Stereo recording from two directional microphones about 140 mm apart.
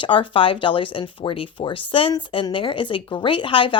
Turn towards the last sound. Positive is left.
turn(degrees=40)  # may be behind; listen again after turning